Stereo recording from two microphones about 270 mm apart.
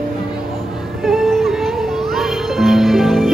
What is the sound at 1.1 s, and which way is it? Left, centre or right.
Music, centre.